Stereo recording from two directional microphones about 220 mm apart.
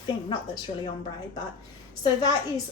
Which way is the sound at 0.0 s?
20° left (ahead or behind).